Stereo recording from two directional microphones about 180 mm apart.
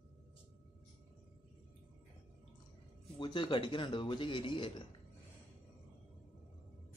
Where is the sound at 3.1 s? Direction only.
25° left (ahead or behind).